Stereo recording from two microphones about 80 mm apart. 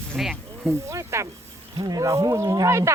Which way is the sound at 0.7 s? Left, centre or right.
Right.